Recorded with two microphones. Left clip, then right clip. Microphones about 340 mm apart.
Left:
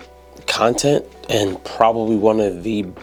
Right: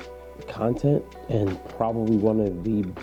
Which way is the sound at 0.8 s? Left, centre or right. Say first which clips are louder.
Left 8 dB; centre.